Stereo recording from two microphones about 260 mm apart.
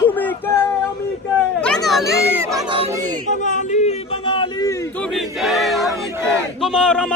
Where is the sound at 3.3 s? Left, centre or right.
Left; by 5.0 s centre.